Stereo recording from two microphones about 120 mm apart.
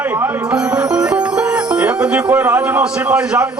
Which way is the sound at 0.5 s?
5° right (ahead or behind).